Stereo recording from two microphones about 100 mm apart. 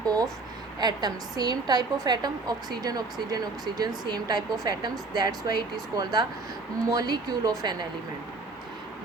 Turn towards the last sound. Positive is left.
turn(degrees=-40)  # may be behind; listen again after turning